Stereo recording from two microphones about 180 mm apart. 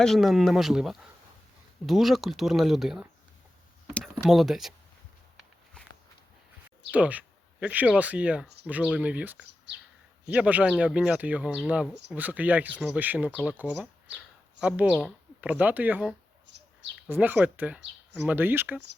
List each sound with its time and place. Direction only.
0.0 s speech: centre (ahead or behind)
6.9 s speech: 10° right (ahead or behind)
16.5 s bird: 75° right (ahead or behind)
17.1 s speech: 10° right (ahead or behind)